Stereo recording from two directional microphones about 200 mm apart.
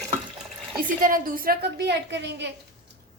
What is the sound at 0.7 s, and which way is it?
A woman's voice, 45° right (ahead or behind).